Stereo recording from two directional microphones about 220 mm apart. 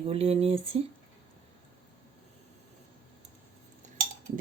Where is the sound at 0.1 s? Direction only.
25° right (ahead or behind).